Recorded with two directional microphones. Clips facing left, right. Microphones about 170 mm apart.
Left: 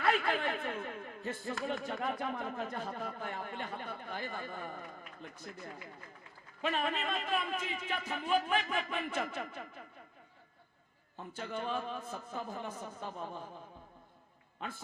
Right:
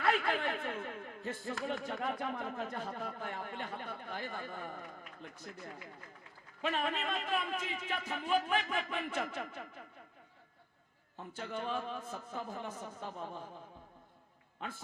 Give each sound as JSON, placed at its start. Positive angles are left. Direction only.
{"t": 0.0, "sound": "speech", "side_deg": 10}
{"t": 11.3, "sound": "speech", "side_deg": 10}